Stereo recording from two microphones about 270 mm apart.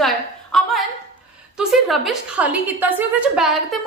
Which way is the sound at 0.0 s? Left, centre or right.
Centre.